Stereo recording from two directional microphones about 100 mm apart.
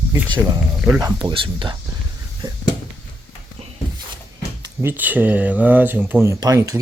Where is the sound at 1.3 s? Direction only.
55° right (ahead or behind).